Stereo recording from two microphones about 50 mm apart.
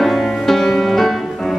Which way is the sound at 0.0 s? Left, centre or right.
Centre.